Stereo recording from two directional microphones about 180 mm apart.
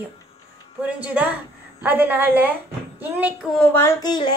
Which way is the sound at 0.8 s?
10° right (ahead or behind).